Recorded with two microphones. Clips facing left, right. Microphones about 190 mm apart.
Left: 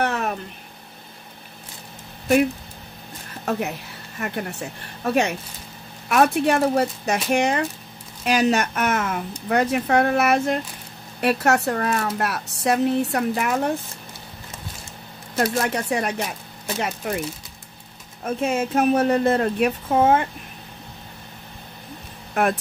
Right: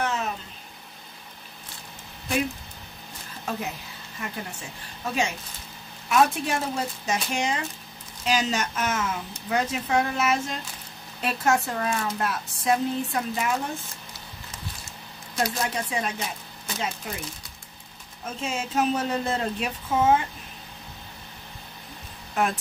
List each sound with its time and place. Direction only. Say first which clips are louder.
0.0 s a sound: left 4 dB; 60° left (ahead or behind)
3.4 s a woman's voice: left 6 dB; 65° left (ahead or behind)
15.3 s speech: left 5 dB; 65° left (ahead or behind)
18.2 s speech: left 8 dB; 60° left (ahead or behind)
22.3 s speech: left 4 dB; 60° left (ahead or behind)